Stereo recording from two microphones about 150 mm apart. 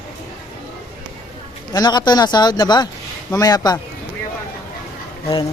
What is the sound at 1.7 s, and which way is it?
A man's voice, 30° left (ahead or behind).